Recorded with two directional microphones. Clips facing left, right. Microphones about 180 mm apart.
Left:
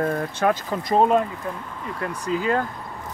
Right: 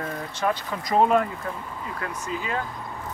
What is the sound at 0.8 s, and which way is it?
Speech, 20° left (ahead or behind).